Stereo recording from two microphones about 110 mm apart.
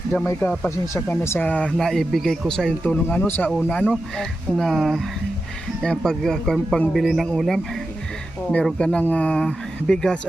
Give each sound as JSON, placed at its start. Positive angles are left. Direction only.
{"t": 0.1, "sound": "a man's voice", "side_deg": 20}